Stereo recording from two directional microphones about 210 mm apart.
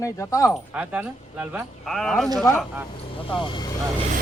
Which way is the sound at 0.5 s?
5° right (ahead or behind).